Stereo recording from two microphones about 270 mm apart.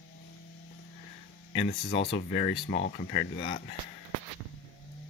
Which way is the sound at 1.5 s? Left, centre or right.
Left.